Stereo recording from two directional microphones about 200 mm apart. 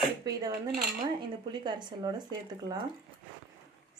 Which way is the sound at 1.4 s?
20° right (ahead or behind).